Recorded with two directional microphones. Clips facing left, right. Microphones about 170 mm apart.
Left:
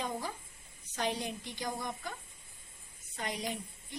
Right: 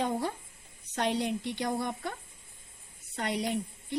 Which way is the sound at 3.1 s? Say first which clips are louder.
Right 7 dB; 65° right (ahead or behind).